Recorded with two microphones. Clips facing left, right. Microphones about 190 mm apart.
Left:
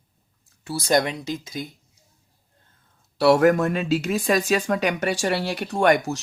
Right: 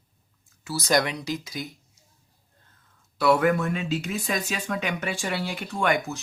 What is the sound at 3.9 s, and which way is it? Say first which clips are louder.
Speech: left 6 dB; 90° left.